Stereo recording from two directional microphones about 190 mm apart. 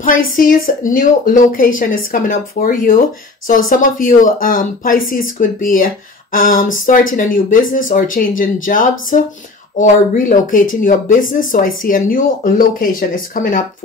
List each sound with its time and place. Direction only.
0.4 s speech: 45° left (ahead or behind)